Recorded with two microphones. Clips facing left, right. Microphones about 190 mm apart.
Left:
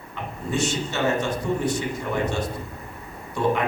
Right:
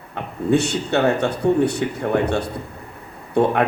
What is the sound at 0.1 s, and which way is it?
A man's voice, 60° right (ahead or behind).